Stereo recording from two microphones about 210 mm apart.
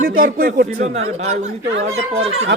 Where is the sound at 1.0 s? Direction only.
30° right (ahead or behind).